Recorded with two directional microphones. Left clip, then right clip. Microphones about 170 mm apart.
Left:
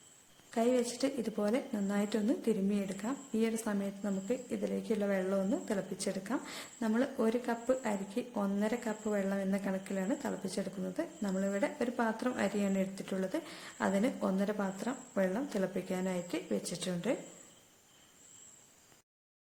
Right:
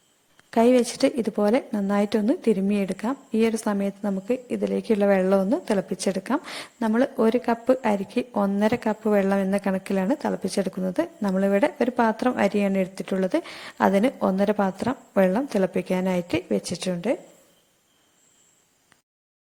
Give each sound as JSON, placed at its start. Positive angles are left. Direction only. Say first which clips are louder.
{"t": 0.5, "sound": "a woman's voice", "louder": "right 12 dB", "side_deg": -45}